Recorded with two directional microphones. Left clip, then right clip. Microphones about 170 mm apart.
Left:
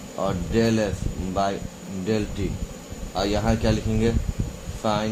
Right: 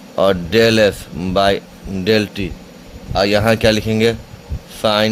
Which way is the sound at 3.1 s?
75° right (ahead or behind).